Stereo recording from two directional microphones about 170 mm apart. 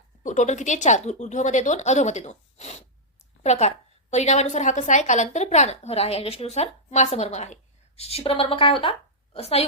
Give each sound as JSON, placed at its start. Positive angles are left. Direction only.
{"t": 0.2, "sound": "a woman's voice", "side_deg": 45}